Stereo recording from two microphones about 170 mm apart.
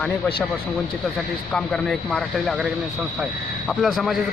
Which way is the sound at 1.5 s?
5° left (ahead or behind).